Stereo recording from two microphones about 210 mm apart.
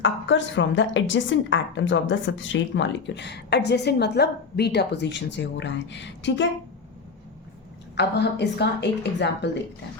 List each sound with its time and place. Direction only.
0.0 s a woman's voice: 60° left (ahead or behind)
7.9 s a woman's voice: 55° left (ahead or behind)